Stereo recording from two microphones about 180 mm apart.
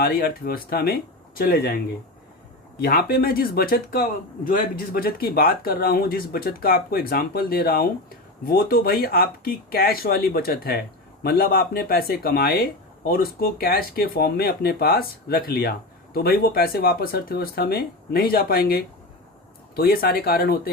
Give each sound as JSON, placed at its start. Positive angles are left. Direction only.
{"t": 0.0, "sound": "speech", "side_deg": 60}
{"t": 2.8, "sound": "speech", "side_deg": 55}